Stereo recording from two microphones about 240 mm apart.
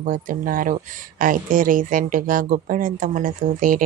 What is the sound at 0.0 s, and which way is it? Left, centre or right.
Speech, right.